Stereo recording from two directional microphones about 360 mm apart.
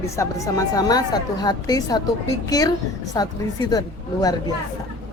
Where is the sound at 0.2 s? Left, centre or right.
Centre.